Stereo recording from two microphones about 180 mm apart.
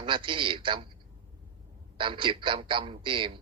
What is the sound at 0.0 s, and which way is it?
Speech, 30° right (ahead or behind).